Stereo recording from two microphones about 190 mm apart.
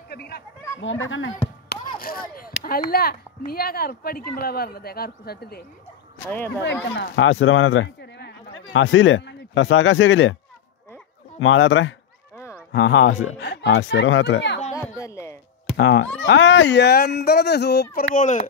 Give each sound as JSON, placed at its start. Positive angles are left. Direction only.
{"t": 0.1, "sound": "speech", "side_deg": 55}
{"t": 0.7, "sound": "speech", "side_deg": 90}
{"t": 1.7, "sound": "speech", "side_deg": 50}
{"t": 6.6, "sound": "speech", "side_deg": 70}
{"t": 8.7, "sound": "speech", "side_deg": 90}
{"t": 11.3, "sound": "speech", "side_deg": 90}
{"t": 14.7, "sound": "a sound", "side_deg": 15}
{"t": 15.8, "sound": "speech", "side_deg": 80}
{"t": 18.1, "sound": "speech", "side_deg": 40}